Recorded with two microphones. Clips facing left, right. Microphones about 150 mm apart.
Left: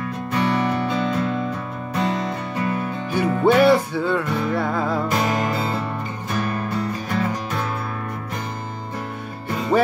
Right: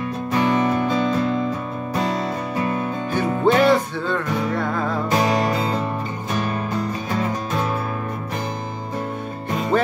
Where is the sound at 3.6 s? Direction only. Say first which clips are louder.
Left 1 dB; 10° left (ahead or behind).